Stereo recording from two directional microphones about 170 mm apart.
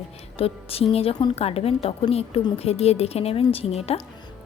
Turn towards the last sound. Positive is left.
turn(degrees=35)  # may be behind; listen again after turning